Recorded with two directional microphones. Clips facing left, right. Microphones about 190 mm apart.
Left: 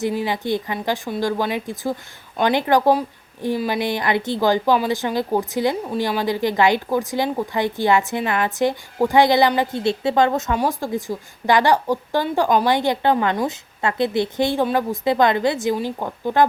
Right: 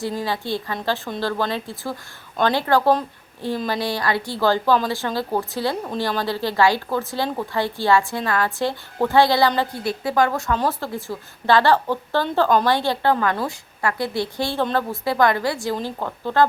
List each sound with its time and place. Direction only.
0.0 s a woman's voice: 15° left (ahead or behind)